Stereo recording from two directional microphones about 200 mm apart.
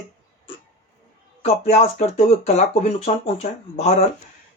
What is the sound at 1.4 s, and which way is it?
Speech, 30° left (ahead or behind).